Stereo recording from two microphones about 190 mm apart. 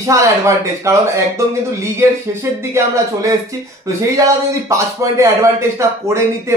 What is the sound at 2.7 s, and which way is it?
Speech, 15° right (ahead or behind).